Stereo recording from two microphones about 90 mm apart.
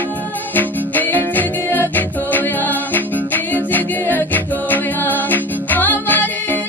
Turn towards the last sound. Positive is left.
turn(degrees=20)  # may be behind; listen again after turning